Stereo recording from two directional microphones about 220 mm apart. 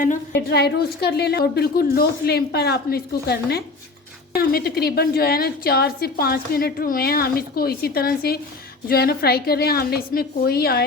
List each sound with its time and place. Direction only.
0.3 s a woman's voice: 50° left (ahead or behind)